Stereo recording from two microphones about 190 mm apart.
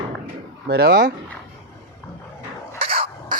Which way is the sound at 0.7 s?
55° right (ahead or behind).